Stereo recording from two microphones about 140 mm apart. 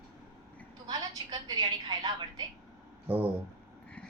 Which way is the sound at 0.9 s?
30° right (ahead or behind).